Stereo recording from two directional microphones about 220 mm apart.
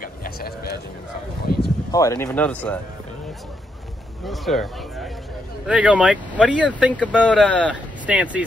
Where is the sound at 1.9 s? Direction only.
15° left (ahead or behind).